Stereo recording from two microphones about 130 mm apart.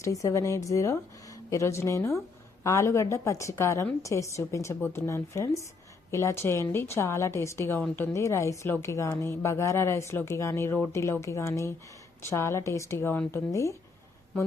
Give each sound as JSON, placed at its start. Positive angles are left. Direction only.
{"t": 0.0, "sound": "speech", "side_deg": 25}